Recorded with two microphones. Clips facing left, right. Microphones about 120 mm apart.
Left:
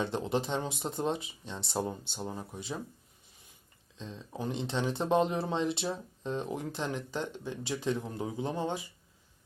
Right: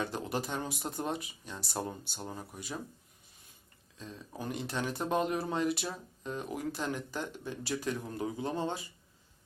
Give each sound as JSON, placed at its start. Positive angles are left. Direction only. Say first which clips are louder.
{"t": 0.0, "sound": "speech", "louder": "left 4 dB", "side_deg": 25}
{"t": 2.5, "sound": "speech", "louder": "left 4 dB", "side_deg": 25}
{"t": 3.9, "sound": "speech", "louder": "left 3 dB", "side_deg": 25}